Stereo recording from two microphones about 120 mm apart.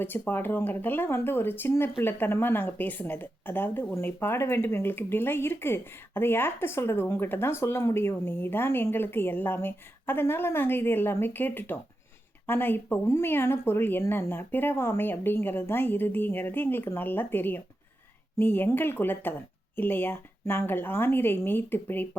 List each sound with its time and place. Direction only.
0.0 s speech: 15° left (ahead or behind)